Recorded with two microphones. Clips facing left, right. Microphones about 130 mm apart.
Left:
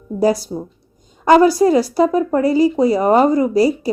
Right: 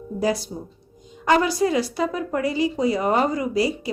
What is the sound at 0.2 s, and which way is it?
A woman's voice, 40° left (ahead or behind).